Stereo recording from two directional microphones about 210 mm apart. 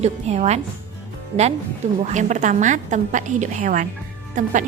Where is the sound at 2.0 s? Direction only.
35° right (ahead or behind).